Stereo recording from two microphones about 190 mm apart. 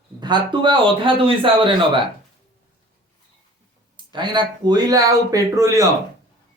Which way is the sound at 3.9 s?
25° right (ahead or behind).